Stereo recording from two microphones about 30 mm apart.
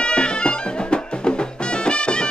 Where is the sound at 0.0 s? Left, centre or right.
Left.